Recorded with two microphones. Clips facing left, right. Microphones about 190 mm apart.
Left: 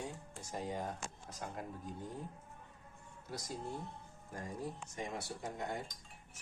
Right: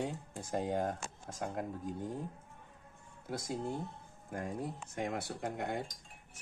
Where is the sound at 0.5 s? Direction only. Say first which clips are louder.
Right 7 dB; 55° right (ahead or behind).